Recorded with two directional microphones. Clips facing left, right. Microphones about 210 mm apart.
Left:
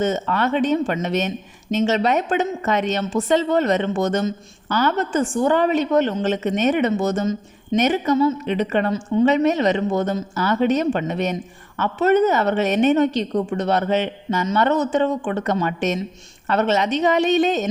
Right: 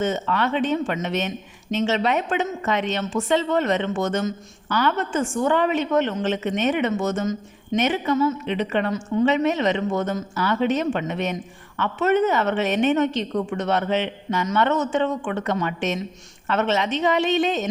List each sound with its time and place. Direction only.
0.0 s a woman's voice: 40° left (ahead or behind)
8.9 s a woman's voice: 30° left (ahead or behind)
9.2 s a woman's voice: 40° left (ahead or behind)